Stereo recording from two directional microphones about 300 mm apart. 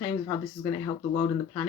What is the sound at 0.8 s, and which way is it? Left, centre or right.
Speech, centre.